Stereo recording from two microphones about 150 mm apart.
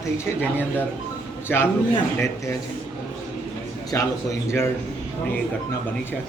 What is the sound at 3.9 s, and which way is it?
Speech, 20° left (ahead or behind).